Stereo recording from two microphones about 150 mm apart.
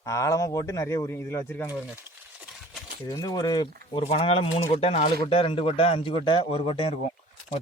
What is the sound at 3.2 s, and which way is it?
Speech, 30° left (ahead or behind).